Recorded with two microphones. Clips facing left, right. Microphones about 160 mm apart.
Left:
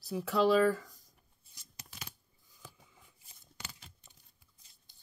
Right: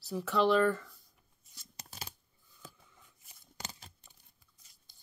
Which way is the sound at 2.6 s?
10° left (ahead or behind).